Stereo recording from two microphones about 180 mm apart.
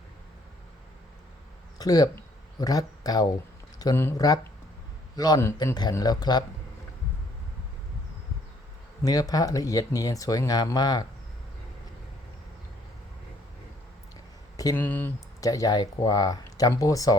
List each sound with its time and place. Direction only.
1.8 s speech: 20° left (ahead or behind)
9.0 s speech: 20° left (ahead or behind)
14.5 s speech: 20° left (ahead or behind)